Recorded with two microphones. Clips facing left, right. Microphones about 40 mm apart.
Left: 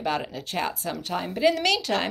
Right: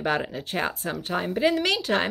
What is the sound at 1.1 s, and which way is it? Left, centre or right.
Speech, centre.